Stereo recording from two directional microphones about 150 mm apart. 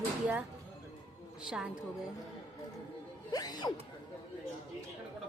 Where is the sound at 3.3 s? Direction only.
25° left (ahead or behind).